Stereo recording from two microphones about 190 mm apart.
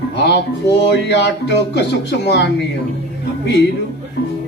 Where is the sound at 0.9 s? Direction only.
65° left (ahead or behind).